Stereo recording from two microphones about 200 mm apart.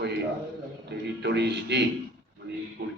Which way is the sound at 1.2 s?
60° right (ahead or behind).